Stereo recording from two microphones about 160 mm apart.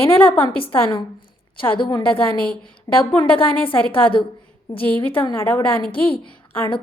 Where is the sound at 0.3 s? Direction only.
30° left (ahead or behind).